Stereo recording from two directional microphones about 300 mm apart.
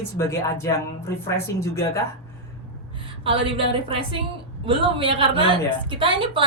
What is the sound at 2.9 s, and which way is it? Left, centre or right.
A woman's voice, centre.